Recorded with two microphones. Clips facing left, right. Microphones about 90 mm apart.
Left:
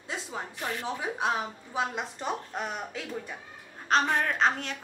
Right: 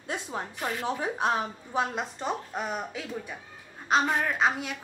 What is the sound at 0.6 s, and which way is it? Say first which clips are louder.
Speech: right 3 dB; 20° right (ahead or behind).